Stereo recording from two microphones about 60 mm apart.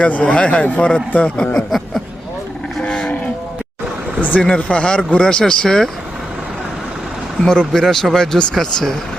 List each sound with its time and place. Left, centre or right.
0.0 s a man's voice: left
2.8 s cattle: centre
4.2 s speech: left; by 5.9 s centre
7.4 s speech: centre